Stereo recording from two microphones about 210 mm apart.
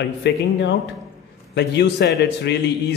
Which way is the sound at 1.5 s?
55° left (ahead or behind).